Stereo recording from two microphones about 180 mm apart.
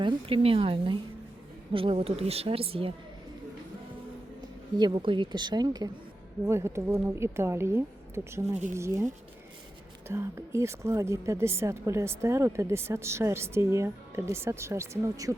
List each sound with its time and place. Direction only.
0.0 s a woman's voice: 30° right (ahead or behind)
4.4 s a woman's voice: 25° right (ahead or behind)
10.1 s a woman's voice: 15° right (ahead or behind)